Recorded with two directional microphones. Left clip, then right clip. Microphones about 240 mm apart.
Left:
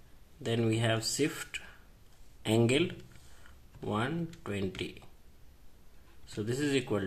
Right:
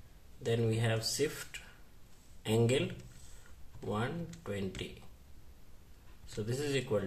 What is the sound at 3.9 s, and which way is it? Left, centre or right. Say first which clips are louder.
Speech: left 3 dB; left.